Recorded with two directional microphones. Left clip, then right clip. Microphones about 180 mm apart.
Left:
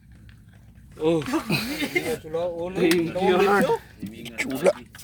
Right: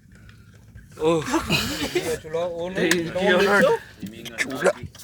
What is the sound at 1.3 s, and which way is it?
Speech, 25° left (ahead or behind).